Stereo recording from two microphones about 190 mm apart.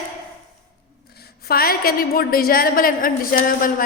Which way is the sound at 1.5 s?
50° left (ahead or behind).